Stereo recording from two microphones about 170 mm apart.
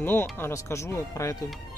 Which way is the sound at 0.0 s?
10° left (ahead or behind).